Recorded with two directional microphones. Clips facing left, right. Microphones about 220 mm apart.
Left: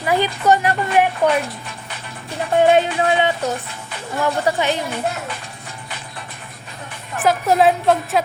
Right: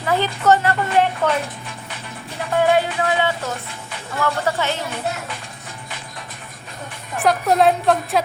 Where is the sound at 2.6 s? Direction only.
20° left (ahead or behind).